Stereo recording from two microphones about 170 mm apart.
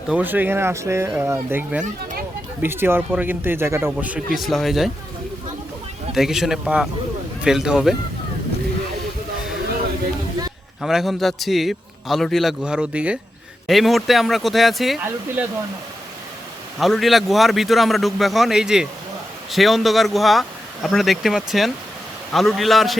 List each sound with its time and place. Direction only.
0.1 s a man's voice: 10° right (ahead or behind)
6.1 s a man's voice: centre (ahead or behind)
10.8 s a man's voice: centre (ahead or behind)
16.7 s a man's voice: centre (ahead or behind)